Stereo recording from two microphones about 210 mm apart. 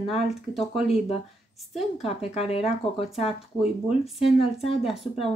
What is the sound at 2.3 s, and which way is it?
Speech, 30° left (ahead or behind).